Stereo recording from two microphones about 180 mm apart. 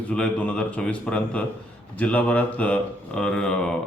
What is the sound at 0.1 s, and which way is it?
Speech, 5° left (ahead or behind).